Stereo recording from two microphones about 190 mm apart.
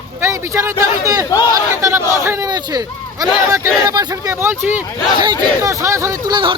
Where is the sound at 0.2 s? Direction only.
15° right (ahead or behind).